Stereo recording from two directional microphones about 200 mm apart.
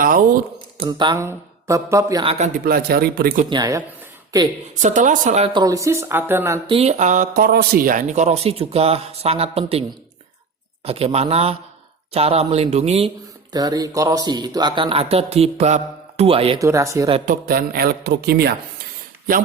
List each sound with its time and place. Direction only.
0.0 s speech: 45° right (ahead or behind)
0.8 s speech: 25° right (ahead or behind)
2.6 s a man's voice: 50° right (ahead or behind)
3.5 s speech: 15° right (ahead or behind)
4.8 s speech: 40° right (ahead or behind)
5.5 s speech: 15° right (ahead or behind)
6.7 s speech: 30° right (ahead or behind)
10.8 s speech: 30° right (ahead or behind)
13.5 s speech: 20° right (ahead or behind)
16.6 s speech: 15° right (ahead or behind)
17.2 s a man's voice: 50° right (ahead or behind)